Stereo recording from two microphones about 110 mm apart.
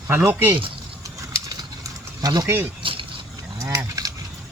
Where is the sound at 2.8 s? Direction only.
50° right (ahead or behind).